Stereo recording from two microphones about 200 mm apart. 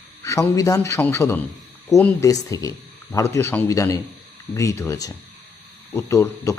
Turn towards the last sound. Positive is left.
turn(degrees=10)  # may be behind; listen again after turning